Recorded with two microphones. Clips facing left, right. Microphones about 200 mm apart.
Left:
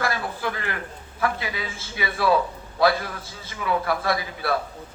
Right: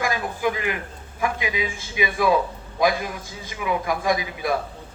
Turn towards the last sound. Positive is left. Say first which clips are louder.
# right 2 dB
turn(degrees=-15)  # may be behind; listen again after turning